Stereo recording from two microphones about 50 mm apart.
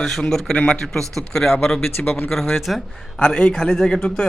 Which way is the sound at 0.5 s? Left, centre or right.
Left.